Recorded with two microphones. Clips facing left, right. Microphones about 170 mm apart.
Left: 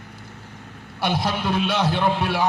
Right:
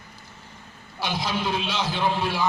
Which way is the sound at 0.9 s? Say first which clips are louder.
Left 4 dB; 60° left (ahead or behind).